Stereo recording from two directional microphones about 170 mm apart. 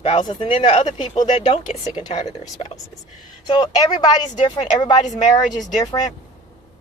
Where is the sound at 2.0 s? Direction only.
25° left (ahead or behind).